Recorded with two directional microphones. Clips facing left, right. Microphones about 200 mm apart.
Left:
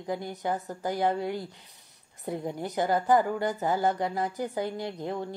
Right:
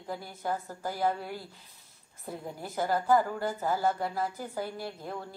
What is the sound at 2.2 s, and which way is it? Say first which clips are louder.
A woman's voice: left 7 dB; 20° left (ahead or behind).